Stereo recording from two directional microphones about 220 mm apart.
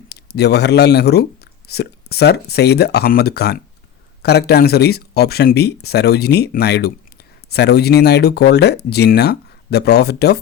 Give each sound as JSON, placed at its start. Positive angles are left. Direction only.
{"t": 0.1, "sound": "speech", "side_deg": 45}